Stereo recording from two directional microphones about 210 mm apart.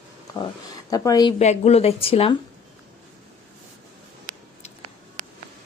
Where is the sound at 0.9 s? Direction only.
15° left (ahead or behind).